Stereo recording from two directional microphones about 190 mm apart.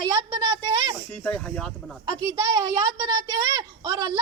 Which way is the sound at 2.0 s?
20° right (ahead or behind).